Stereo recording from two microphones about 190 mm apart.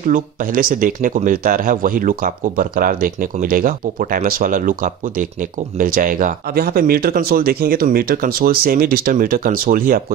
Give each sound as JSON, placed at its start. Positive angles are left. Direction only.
{"t": 0.1, "sound": "speech", "side_deg": -45}